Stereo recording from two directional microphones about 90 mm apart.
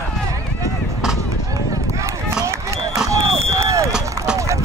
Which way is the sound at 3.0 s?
35° right (ahead or behind).